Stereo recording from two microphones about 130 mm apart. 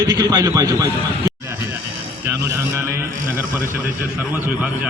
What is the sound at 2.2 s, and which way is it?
A man's voice, 20° right (ahead or behind).